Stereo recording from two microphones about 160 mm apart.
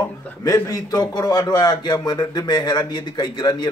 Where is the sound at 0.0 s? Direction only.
20° left (ahead or behind).